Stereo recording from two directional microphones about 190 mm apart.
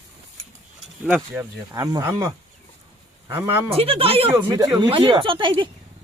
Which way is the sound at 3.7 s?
30° right (ahead or behind).